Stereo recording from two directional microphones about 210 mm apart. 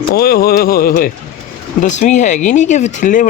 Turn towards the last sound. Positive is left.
turn(degrees=35)  # may be behind; listen again after turning